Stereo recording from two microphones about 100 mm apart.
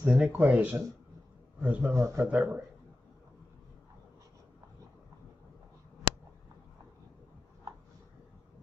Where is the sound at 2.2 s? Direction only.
10° right (ahead or behind).